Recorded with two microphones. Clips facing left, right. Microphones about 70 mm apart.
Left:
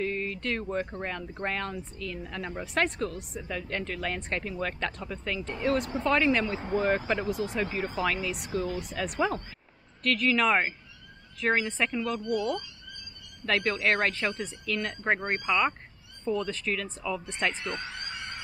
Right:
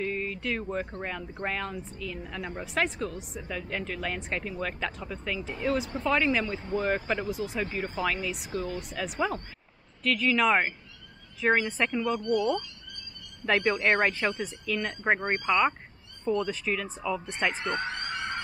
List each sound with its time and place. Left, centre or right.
0.0 s a woman's voice: centre
12.2 s speech: centre
13.6 s a woman's voice: centre
17.7 s speech: right